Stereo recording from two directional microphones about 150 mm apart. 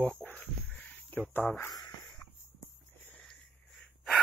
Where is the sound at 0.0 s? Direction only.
10° left (ahead or behind).